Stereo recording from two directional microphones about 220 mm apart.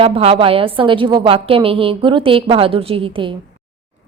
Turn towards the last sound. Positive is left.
turn(degrees=-25)  # may be behind; listen again after turning